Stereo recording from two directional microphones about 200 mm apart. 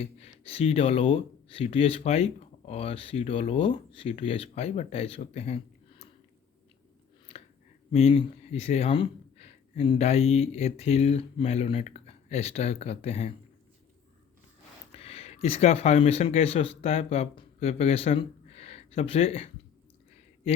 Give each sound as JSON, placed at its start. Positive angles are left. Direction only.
{"t": 0.0, "sound": "speech", "side_deg": 30}
{"t": 7.9, "sound": "speech", "side_deg": 30}
{"t": 14.9, "sound": "speech", "side_deg": 30}